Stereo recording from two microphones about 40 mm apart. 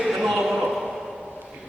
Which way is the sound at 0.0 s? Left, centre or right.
Centre.